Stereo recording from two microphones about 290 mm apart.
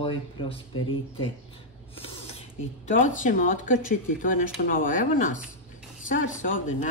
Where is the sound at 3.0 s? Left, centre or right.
Left.